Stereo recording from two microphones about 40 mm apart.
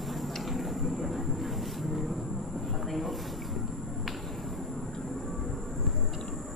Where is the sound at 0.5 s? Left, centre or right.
Centre.